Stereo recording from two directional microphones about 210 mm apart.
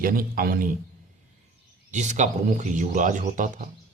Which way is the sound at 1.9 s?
35° right (ahead or behind).